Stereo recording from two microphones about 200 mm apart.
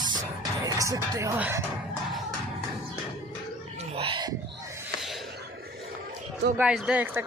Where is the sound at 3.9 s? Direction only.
25° right (ahead or behind).